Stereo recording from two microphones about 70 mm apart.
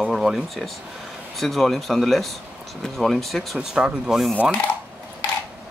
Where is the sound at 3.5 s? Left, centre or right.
Centre.